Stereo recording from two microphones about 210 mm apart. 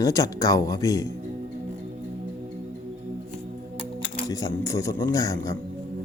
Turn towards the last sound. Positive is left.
turn(degrees=15)  # may be behind; listen again after turning